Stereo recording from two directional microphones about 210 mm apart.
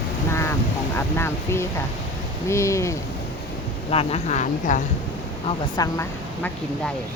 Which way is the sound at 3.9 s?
30° left (ahead or behind).